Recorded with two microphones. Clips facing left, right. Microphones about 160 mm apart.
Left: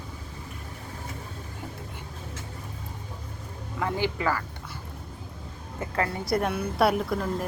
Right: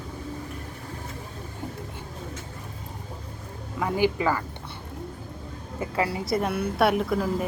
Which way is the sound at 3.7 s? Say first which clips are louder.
Right 4 dB; 15° right (ahead or behind).